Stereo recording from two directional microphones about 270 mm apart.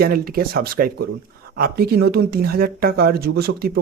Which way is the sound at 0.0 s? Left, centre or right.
Right.